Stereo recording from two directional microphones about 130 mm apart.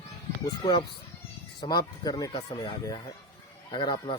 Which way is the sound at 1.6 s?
35° left (ahead or behind).